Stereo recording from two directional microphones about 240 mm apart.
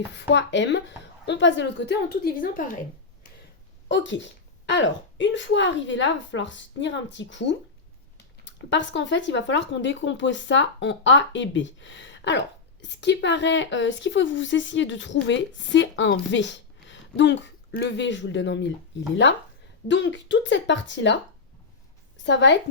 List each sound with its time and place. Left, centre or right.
0.1 s speech: left
3.8 s speech: left
19.9 s speech: left
22.2 s a woman's voice: left